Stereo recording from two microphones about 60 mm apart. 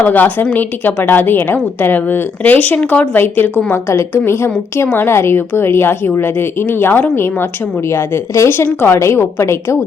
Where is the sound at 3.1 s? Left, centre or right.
Left.